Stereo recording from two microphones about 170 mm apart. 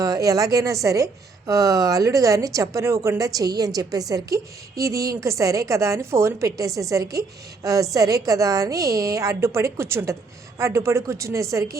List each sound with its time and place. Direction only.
0.0 s a woman's voice: 20° right (ahead or behind)